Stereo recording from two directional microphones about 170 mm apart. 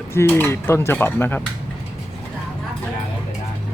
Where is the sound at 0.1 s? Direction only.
15° left (ahead or behind).